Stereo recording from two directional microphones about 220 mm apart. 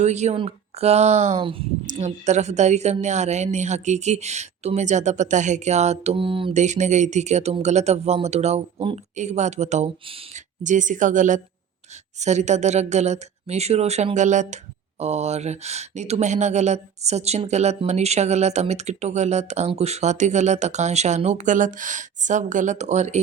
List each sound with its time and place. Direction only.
0.0 s speech: 30° right (ahead or behind)